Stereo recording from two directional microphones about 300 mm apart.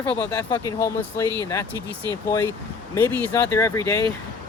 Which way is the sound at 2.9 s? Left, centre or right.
Centre.